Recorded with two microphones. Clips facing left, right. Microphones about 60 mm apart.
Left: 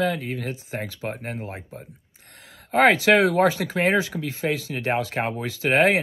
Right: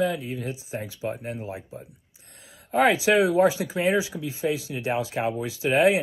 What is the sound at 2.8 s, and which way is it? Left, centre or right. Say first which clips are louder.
Speech: left 3 dB; left.